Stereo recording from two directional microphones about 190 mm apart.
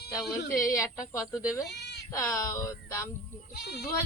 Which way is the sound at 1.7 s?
60° left (ahead or behind).